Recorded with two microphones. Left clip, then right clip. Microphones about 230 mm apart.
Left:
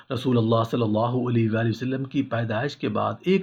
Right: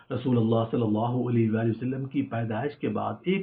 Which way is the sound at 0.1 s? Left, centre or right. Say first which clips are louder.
Left 3 dB; left.